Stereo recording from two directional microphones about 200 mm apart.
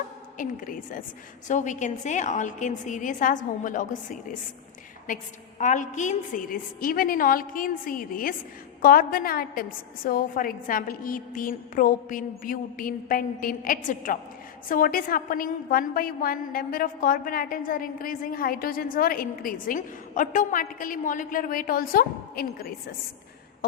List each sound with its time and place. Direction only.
0.3 s a woman's voice: 40° left (ahead or behind)